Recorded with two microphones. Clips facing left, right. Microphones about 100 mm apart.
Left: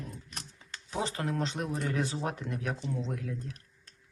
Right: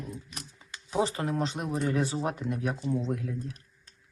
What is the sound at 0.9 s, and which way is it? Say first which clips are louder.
Speech: right 5 dB; 30° right (ahead or behind).